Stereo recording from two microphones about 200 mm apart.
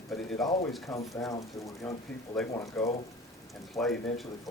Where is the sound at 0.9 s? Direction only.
15° left (ahead or behind).